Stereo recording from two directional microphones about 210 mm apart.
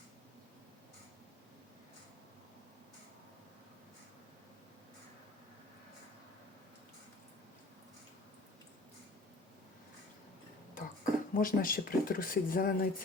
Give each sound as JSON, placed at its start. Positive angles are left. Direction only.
{"t": 10.8, "sound": "speech", "side_deg": 40}